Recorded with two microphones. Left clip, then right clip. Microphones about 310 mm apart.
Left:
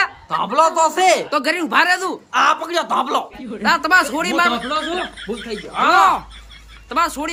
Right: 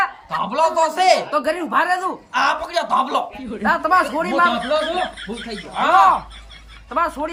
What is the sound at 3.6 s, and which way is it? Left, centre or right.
Speech, centre.